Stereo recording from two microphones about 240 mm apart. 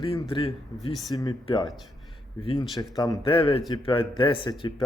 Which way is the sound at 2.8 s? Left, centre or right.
Centre.